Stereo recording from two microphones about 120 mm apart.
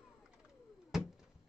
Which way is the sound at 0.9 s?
Centre (ahead or behind).